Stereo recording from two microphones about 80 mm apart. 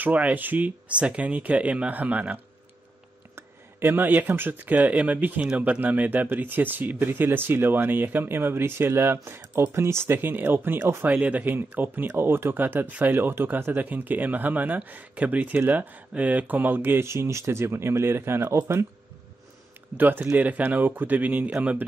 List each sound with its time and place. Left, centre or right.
0.0 s speech: centre
20.0 s speech: right